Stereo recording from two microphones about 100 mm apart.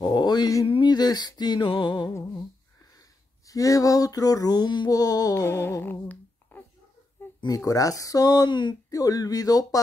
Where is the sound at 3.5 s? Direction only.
35° left (ahead or behind); by 6.6 s 20° left (ahead or behind).